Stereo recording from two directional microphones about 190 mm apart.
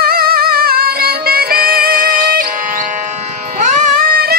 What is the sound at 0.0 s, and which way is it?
Music, 55° right (ahead or behind).